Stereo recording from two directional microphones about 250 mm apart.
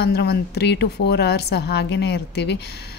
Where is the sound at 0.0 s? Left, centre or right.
Left.